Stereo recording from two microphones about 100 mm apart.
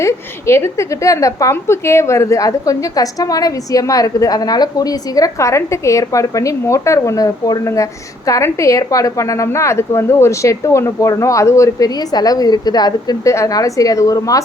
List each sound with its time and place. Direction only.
0.0 s a woman's voice: 25° left (ahead or behind)
11.9 s a woman's voice: 40° left (ahead or behind)